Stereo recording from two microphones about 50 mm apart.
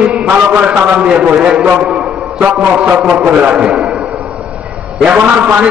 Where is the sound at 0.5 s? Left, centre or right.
Right.